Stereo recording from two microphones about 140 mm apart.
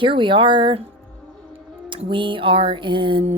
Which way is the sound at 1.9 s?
35° right (ahead or behind).